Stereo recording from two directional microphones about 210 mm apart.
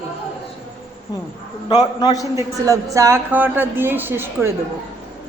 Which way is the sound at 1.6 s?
20° left (ahead or behind).